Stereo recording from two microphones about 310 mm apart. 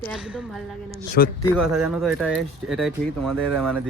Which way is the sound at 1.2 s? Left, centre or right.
Left.